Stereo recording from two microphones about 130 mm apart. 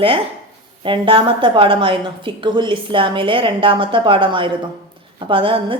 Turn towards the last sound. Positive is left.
turn(degrees=-45)  # may be behind; listen again after turning